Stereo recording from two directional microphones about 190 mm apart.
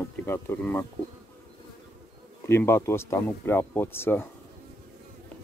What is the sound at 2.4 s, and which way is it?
Speech, 15° left (ahead or behind).